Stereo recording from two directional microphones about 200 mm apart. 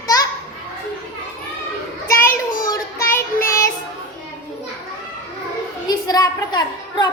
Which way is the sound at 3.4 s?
15° left (ahead or behind).